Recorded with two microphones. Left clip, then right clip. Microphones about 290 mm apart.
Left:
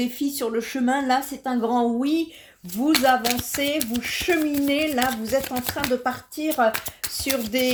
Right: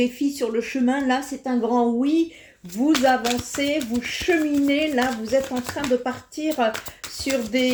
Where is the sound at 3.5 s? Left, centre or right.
Left.